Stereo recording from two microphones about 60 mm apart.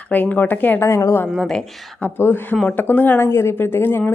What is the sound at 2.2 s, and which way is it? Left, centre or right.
Speech, left.